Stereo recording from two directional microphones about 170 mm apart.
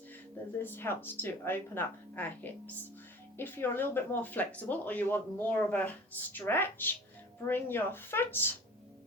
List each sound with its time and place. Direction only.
0.6 s speech: 10° left (ahead or behind)